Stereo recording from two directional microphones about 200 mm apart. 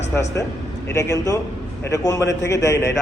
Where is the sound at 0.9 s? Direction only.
15° left (ahead or behind).